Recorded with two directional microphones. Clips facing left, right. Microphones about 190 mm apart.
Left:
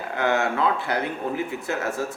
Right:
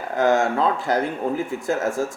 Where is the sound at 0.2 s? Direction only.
40° right (ahead or behind).